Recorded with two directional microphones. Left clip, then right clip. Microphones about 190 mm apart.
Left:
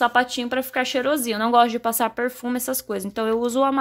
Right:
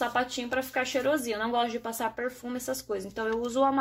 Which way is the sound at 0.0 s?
55° left (ahead or behind).